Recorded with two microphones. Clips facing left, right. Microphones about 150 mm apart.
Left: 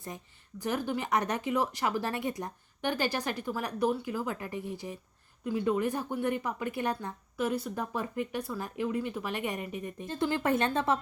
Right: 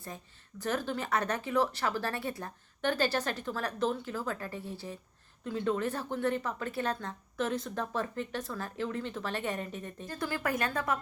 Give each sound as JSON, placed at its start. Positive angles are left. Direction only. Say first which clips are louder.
{"t": 0.6, "sound": "speech", "louder": "left 1 dB", "side_deg": 15}